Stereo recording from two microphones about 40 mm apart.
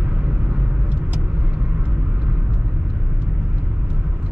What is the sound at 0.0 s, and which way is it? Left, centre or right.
Vehicle, right.